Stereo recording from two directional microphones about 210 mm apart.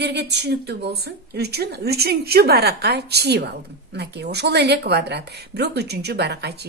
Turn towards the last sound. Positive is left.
turn(degrees=-50)  # may be behind; listen again after turning